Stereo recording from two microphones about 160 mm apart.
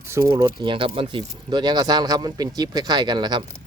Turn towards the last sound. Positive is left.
turn(degrees=-25)  # may be behind; listen again after turning